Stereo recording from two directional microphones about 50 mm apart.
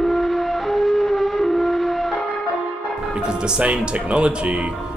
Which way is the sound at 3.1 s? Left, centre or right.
Centre.